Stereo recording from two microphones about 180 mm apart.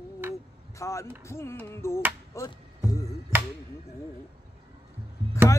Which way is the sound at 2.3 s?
20° left (ahead or behind).